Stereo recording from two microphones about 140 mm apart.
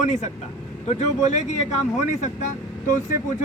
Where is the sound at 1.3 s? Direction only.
60° left (ahead or behind).